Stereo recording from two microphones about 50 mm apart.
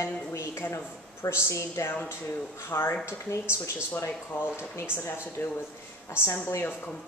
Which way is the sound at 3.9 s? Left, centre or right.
Left.